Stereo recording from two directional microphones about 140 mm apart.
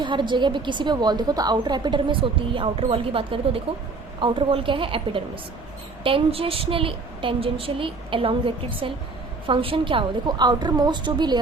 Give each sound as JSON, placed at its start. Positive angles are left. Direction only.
{"t": 0.0, "sound": "a woman's voice", "side_deg": -35}